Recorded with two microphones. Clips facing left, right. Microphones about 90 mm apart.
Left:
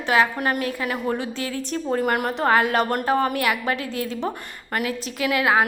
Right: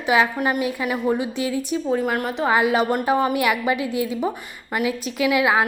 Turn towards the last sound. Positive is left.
turn(degrees=-15)  # may be behind; listen again after turning